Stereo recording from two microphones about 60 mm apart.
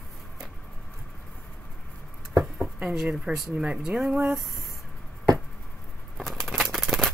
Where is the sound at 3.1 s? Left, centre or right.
Centre.